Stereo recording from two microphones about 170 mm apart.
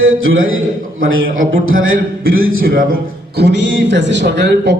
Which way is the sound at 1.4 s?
55° right (ahead or behind).